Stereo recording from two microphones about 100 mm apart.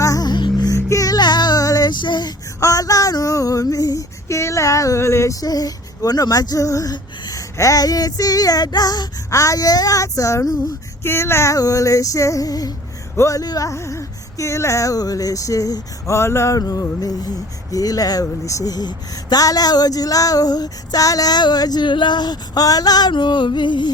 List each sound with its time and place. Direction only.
0.0 s music: 35° left (ahead or behind)
0.7 s music: 35° left (ahead or behind); by 2.3 s 50° left (ahead or behind)
2.6 s speech: 35° left (ahead or behind)
11.0 s speech: 25° left (ahead or behind); by 23.9 s 50° left (ahead or behind)